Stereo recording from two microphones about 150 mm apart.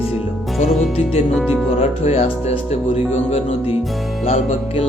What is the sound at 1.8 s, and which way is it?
Speech, 40° left (ahead or behind).